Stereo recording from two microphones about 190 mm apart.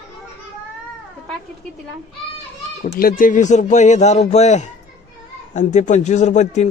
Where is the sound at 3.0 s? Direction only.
50° left (ahead or behind).